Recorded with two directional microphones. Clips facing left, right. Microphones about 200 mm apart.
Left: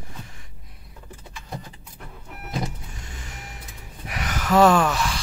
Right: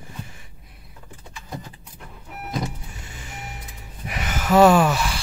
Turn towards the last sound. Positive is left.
turn(degrees=-5)  # may be behind; listen again after turning